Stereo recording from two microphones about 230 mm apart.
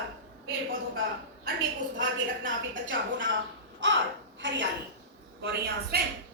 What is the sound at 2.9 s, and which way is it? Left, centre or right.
A woman's voice, right.